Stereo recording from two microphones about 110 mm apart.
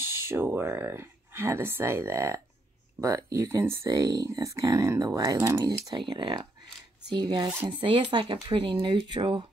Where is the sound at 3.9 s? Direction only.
35° right (ahead or behind).